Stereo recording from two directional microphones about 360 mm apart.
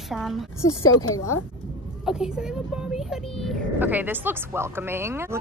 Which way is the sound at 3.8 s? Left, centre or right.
Centre.